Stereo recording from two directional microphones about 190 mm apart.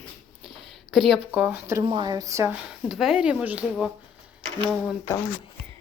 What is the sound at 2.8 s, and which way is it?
A woman's voice, centre (ahead or behind).